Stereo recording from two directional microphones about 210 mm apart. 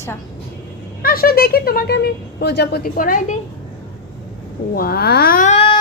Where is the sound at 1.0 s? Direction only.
45° left (ahead or behind).